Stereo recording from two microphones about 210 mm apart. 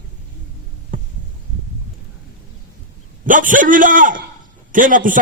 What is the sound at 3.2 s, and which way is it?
A man's voice, 40° right (ahead or behind).